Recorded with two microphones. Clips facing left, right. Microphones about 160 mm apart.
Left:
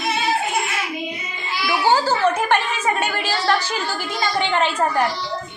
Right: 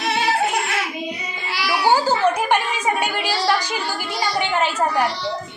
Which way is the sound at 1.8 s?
15° right (ahead or behind).